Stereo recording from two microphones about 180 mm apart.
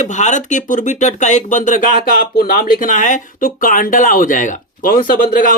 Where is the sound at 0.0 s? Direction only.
40° left (ahead or behind).